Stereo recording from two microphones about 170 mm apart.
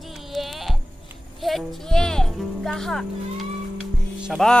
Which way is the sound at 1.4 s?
Centre (ahead or behind).